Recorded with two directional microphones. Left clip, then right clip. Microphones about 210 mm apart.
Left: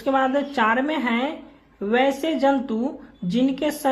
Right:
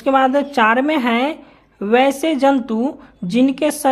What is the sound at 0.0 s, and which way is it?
Speech, 35° right (ahead or behind).